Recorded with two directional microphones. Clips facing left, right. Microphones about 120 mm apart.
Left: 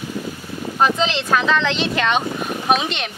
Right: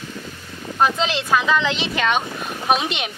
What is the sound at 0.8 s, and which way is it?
Speech, centre (ahead or behind).